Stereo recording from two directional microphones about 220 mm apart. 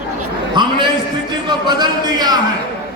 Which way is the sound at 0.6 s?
20° right (ahead or behind).